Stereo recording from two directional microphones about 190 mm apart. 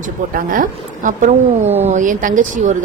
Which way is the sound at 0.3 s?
45° right (ahead or behind).